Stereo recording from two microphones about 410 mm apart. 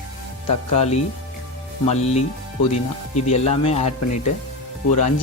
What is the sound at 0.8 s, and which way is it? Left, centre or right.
Speech, centre.